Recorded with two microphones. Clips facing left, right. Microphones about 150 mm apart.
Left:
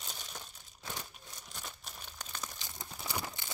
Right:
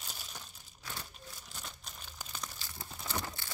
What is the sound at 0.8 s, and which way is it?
Crumpling, 20° left (ahead or behind).